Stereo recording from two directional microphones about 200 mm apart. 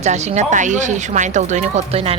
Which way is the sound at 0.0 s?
35° right (ahead or behind).